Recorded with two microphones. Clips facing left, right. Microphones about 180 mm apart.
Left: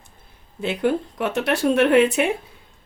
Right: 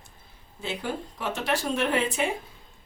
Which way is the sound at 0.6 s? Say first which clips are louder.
Left 10 dB; 65° left (ahead or behind).